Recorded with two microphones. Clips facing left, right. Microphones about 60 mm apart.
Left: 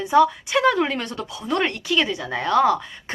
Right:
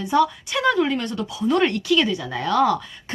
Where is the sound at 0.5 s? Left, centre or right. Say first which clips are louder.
Left 1 dB; left.